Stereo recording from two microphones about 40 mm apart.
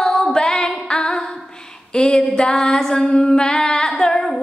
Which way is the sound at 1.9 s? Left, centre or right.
Centre.